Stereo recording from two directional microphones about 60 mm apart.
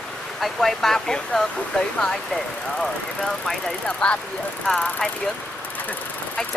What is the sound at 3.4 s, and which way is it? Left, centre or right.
Speech, centre.